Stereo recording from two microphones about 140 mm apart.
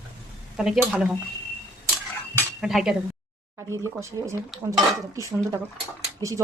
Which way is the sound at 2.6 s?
5° right (ahead or behind).